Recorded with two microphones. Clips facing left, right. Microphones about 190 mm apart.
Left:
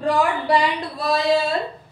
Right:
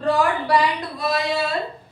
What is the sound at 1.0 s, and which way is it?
Speech, 35° left (ahead or behind).